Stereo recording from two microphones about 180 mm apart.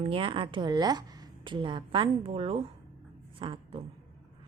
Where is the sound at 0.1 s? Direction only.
30° right (ahead or behind).